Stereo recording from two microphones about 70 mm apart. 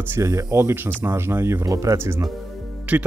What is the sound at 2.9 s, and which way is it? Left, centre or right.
Speech, right.